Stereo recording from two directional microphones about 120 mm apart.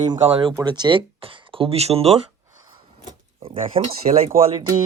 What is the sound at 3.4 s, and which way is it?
Speech, 50° right (ahead or behind).